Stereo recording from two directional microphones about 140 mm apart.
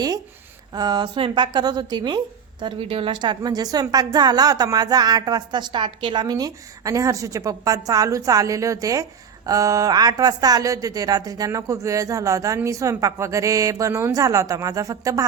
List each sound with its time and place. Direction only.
0.7 s a woman's voice: 30° right (ahead or behind)